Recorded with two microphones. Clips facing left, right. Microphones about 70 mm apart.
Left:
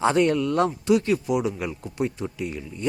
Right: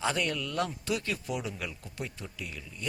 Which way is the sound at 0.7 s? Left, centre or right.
Left.